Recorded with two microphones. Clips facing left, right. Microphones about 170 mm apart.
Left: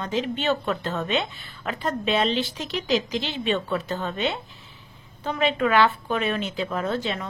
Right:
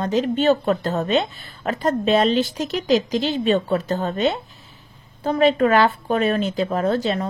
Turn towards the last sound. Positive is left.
turn(degrees=-40)  # may be behind; listen again after turning